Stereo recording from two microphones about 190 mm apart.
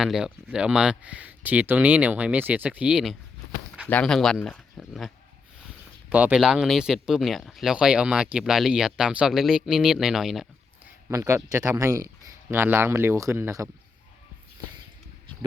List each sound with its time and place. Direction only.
0.0 s speech: 5° right (ahead or behind)
11.1 s speech: 15° right (ahead or behind)